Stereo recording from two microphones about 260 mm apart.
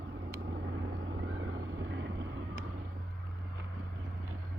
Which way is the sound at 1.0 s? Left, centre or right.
Right.